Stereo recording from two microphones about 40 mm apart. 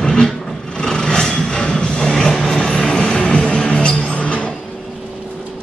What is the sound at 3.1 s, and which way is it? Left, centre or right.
Music, left.